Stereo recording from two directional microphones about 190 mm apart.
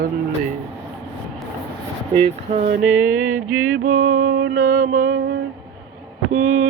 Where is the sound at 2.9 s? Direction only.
10° right (ahead or behind).